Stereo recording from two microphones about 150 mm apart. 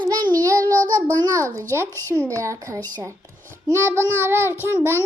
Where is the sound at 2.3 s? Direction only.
20° right (ahead or behind).